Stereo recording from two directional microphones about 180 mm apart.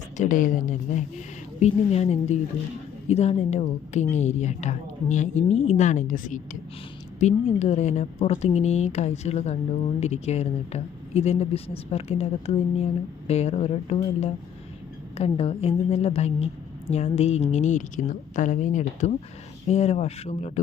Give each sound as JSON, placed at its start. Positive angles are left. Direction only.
{"t": 0.2, "sound": "a woman's voice", "side_deg": 45}